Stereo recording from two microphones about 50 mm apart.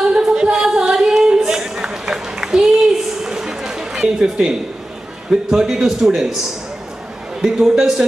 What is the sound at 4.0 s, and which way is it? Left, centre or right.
A man's voice, centre.